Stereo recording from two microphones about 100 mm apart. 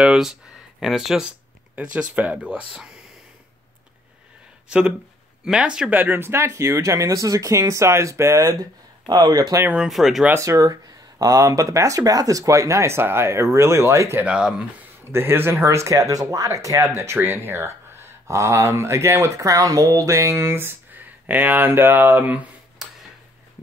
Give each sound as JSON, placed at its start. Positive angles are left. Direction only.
{"t": 0.0, "sound": "speech", "side_deg": -5}
{"t": 4.6, "sound": "speech", "side_deg": -10}
{"t": 9.8, "sound": "speech", "side_deg": 0}
{"t": 10.4, "sound": "speech", "side_deg": -35}
{"t": 14.2, "sound": "speech", "side_deg": -10}
{"t": 15.0, "sound": "speech", "side_deg": -25}
{"t": 22.8, "sound": "a sound", "side_deg": -5}